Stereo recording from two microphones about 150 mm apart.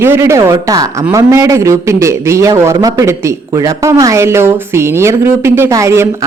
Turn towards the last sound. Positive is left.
turn(degrees=-20)  # may be behind; listen again after turning